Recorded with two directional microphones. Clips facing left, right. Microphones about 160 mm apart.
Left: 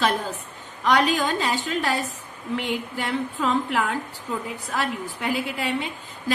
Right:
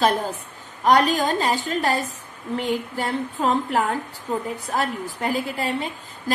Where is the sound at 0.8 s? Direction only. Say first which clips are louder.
Right 3 dB; 40° right (ahead or behind).